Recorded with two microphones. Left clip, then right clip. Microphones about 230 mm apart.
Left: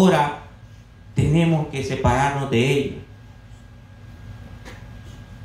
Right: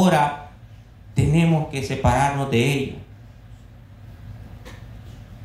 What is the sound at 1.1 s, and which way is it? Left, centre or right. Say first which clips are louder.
Speech: left 1 dB; right.